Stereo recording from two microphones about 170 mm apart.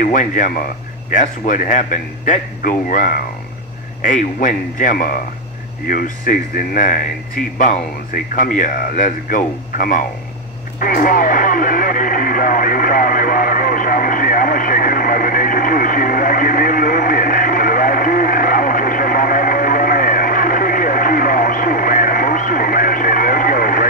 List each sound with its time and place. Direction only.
0.0 s speech: 50° left (ahead or behind)
10.8 s radio: 55° left (ahead or behind)